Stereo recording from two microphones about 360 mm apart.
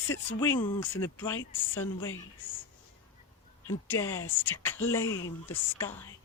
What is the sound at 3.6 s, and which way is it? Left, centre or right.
Speech, centre.